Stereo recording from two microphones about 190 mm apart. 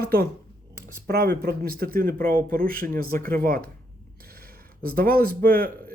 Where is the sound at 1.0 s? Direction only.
55° right (ahead or behind).